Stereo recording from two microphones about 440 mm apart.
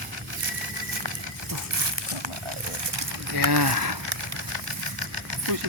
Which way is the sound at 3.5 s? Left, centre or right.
Right.